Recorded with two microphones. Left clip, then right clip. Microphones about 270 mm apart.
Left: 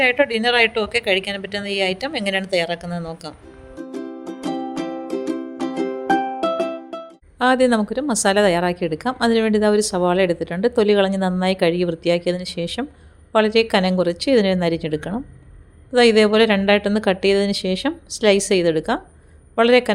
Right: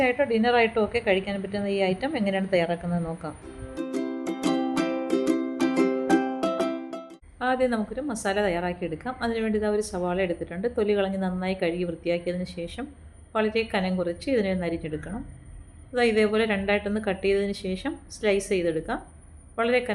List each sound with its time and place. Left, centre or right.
0.0 s a woman's voice: left
3.9 s music: centre
4.5 s music: left
5.1 s music: centre
5.6 s music: left
6.4 s music: centre
7.3 s a woman's voice: left